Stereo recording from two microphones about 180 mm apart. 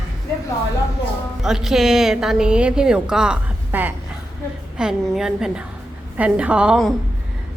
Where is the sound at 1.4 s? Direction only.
5° right (ahead or behind).